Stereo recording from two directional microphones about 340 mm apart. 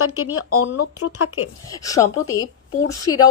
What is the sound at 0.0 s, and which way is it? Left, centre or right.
Speech, left.